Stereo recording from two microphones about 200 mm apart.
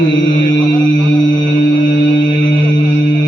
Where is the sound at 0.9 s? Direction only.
70° left (ahead or behind).